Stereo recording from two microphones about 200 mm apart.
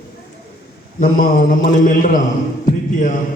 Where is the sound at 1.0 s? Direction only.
40° left (ahead or behind).